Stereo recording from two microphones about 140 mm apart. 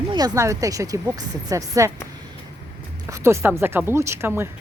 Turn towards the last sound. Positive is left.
turn(degrees=-20)  # may be behind; listen again after turning